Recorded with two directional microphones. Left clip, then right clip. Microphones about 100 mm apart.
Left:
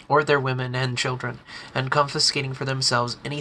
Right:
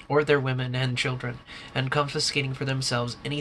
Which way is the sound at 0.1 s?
15° left (ahead or behind).